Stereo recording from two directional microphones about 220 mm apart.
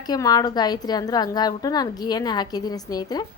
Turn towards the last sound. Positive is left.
turn(degrees=15)  # may be behind; listen again after turning